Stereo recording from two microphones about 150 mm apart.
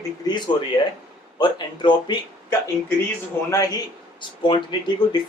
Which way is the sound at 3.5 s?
25° left (ahead or behind).